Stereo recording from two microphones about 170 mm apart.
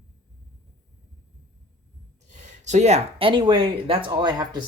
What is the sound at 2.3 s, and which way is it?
Speech, 45° right (ahead or behind).